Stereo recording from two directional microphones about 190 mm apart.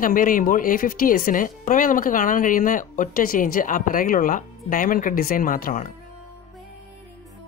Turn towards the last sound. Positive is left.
turn(degrees=45)  # may be behind; listen again after turning